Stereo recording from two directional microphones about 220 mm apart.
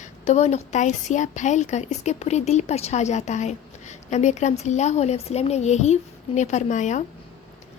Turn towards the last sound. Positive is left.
turn(degrees=35)  # may be behind; listen again after turning